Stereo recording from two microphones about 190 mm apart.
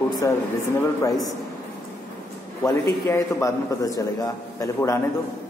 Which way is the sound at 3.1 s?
15° left (ahead or behind).